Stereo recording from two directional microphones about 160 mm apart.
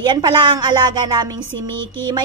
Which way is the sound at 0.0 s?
30° right (ahead or behind).